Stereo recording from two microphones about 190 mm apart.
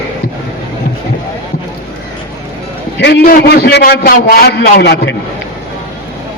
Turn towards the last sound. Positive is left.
turn(degrees=60)  # may be behind; listen again after turning